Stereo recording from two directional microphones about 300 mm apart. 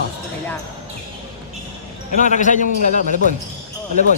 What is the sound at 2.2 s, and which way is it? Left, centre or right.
Speech, left.